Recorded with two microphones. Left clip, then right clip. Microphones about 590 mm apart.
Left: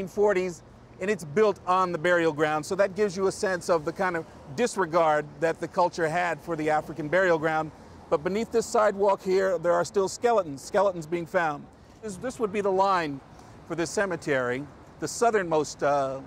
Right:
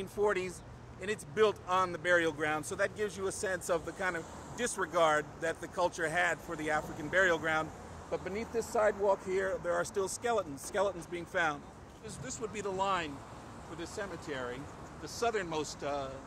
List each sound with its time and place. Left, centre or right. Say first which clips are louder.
0.0 s speech: left 8 dB; left
13.9 s speech: left 13 dB; left
15.3 s speech: left 11 dB; left